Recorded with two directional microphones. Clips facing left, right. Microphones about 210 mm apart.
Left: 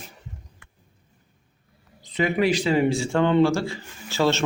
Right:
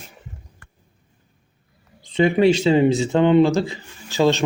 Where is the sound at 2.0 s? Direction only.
30° right (ahead or behind).